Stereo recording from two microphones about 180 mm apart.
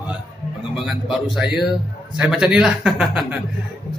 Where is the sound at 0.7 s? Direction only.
Centre (ahead or behind).